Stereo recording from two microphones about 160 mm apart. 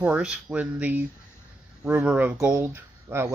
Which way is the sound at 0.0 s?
5° right (ahead or behind).